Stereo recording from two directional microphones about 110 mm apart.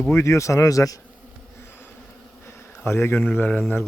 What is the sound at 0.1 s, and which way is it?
Speech, 25° left (ahead or behind).